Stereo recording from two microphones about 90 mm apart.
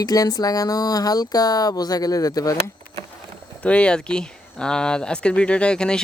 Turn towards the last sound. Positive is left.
turn(degrees=10)  # may be behind; listen again after turning